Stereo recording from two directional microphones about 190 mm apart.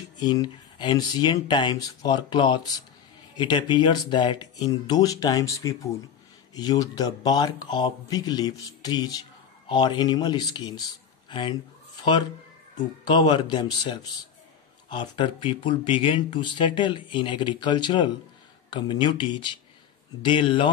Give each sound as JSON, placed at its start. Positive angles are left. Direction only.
{"t": 0.2, "sound": "speech", "side_deg": 20}